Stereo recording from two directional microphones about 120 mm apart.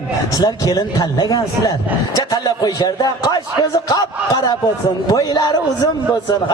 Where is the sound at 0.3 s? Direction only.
30° left (ahead or behind).